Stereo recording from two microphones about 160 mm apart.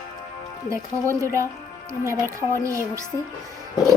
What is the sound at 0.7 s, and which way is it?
Speech, 20° right (ahead or behind).